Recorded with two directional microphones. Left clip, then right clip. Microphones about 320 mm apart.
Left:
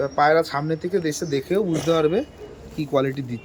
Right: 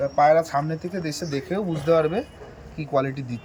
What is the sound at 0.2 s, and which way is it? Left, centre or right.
Speech, centre.